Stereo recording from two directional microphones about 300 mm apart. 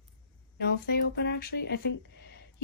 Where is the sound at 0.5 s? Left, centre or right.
Left.